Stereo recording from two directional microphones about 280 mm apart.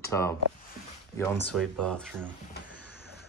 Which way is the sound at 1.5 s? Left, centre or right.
Centre.